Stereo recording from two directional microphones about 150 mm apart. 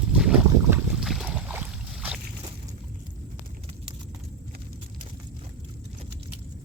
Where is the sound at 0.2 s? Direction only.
5° right (ahead or behind).